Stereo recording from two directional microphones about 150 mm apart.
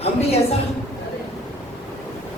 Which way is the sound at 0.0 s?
45° left (ahead or behind).